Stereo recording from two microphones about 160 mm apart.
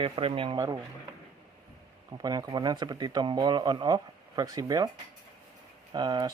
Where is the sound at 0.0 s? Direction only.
35° right (ahead or behind).